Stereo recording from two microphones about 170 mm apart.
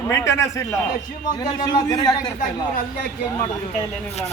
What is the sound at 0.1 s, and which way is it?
A man's voice, 15° left (ahead or behind).